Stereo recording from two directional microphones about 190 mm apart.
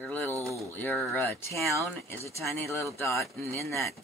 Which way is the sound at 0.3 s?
15° right (ahead or behind).